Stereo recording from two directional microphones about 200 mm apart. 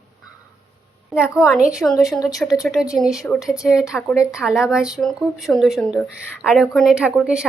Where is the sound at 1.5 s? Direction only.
Centre (ahead or behind).